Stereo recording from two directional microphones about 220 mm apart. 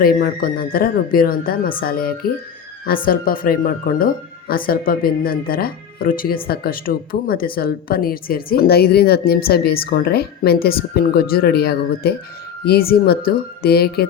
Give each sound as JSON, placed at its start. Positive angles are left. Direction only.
{"t": 0.0, "sound": "speech", "side_deg": 40}